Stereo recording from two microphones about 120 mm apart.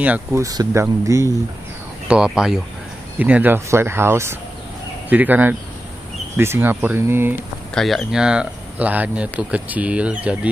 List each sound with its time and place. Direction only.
0.3 s speech: 30° right (ahead or behind)
2.0 s speech: 5° right (ahead or behind)
7.7 s speech: 5° left (ahead or behind)